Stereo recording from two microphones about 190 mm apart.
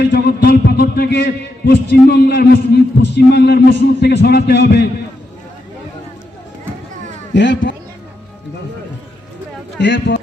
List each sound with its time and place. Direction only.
0.0 s a man's voice: 60° left (ahead or behind)
7.3 s a man's voice: 70° left (ahead or behind)
9.7 s speech: 70° left (ahead or behind)